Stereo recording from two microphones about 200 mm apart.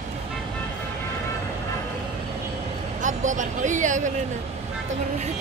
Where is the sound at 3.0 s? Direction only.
40° right (ahead or behind).